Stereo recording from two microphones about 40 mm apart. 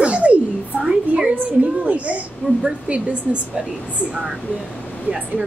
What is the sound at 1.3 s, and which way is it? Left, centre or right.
A woman's voice, right.